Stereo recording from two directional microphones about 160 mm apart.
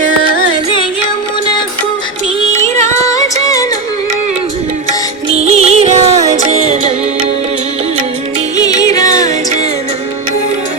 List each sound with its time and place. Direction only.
2.6 s music: 15° left (ahead or behind)
5.4 s music: 40° right (ahead or behind)
8.5 s music: 25° left (ahead or behind)